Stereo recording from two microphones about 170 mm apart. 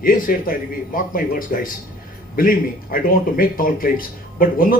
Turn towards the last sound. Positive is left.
turn(degrees=55)  # may be behind; listen again after turning